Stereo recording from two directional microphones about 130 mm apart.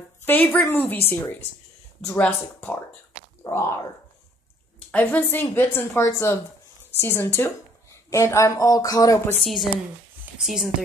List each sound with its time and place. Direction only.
0.2 s a woman's voice: 15° left (ahead or behind)
2.0 s a woman's voice: 5° left (ahead or behind)
3.4 s speech: 20° left (ahead or behind)
4.9 s a woman's voice: 15° left (ahead or behind)
9.4 s speech: centre (ahead or behind)